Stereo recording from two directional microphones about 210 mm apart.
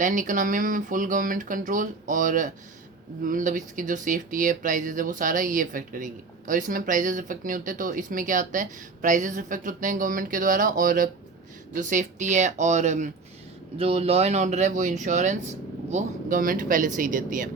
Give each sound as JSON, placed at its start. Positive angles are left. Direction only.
{"t": 0.0, "sound": "speech", "side_deg": -40}